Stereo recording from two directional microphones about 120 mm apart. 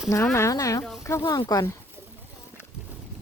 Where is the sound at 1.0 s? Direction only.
25° left (ahead or behind).